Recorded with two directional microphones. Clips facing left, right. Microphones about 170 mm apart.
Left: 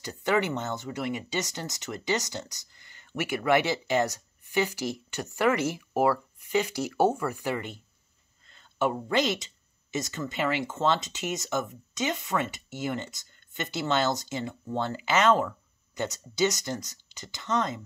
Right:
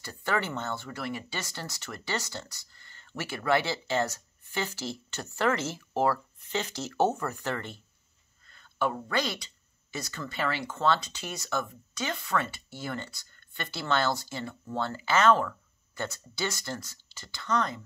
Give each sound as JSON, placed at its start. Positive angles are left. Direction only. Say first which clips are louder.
{"t": 0.0, "sound": "speech", "louder": "left 5 dB", "side_deg": 20}